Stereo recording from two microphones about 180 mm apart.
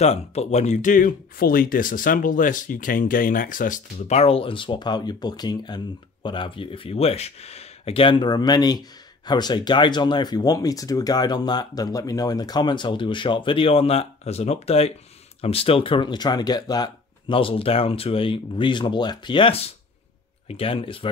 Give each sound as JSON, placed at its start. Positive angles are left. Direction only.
{"t": 0.0, "sound": "speech", "side_deg": 35}